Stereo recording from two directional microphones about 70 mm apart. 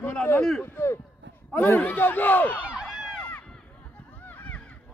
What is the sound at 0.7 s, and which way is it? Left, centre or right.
Speech, left.